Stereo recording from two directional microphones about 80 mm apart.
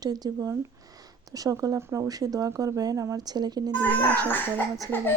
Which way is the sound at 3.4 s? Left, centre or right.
Right.